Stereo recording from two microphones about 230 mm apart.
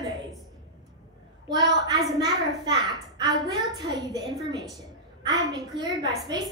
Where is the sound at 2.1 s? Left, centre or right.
Centre.